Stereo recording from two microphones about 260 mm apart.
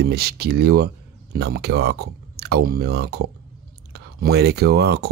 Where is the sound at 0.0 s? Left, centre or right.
Right.